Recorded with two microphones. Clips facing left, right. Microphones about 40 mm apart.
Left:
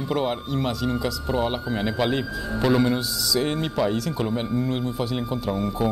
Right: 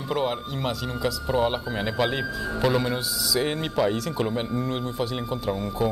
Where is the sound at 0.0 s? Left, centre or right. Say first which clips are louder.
Left 1 dB; centre.